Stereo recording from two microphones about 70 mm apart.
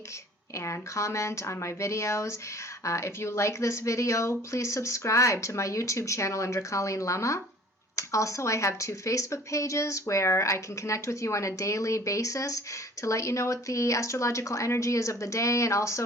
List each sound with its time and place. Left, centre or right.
0.5 s speech: left